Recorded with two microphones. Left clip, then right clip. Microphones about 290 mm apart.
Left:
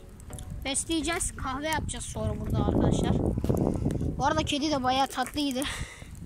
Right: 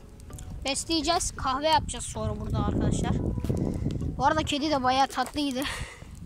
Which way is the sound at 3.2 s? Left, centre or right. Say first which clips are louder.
Left 4 dB; left.